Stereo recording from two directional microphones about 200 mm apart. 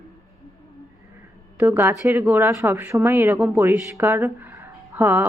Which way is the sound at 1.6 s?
10° right (ahead or behind).